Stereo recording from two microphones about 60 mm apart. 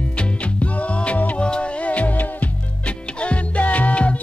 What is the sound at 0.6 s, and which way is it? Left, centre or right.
Music, left.